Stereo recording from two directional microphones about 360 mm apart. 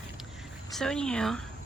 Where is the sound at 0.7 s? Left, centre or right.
Centre.